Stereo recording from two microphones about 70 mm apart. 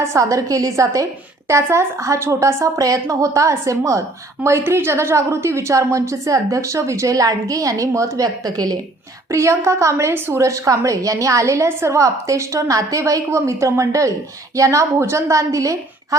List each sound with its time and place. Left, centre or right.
0.0 s a woman's voice: right
1.6 s speech: right
2.7 s a woman's voice: right
8.4 s a woman's voice: right
9.3 s a woman's voice: right